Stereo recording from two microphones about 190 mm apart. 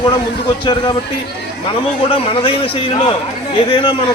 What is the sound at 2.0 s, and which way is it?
A man's voice, 30° left (ahead or behind).